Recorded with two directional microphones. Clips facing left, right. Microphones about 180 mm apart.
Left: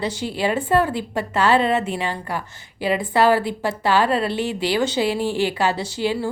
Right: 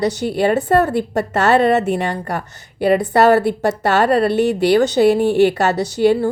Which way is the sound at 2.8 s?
55° right (ahead or behind).